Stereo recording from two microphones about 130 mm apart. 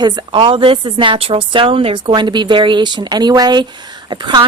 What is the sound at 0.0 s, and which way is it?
Speech, 35° right (ahead or behind).